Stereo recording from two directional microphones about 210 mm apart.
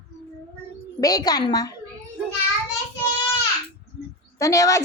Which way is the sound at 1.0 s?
20° left (ahead or behind).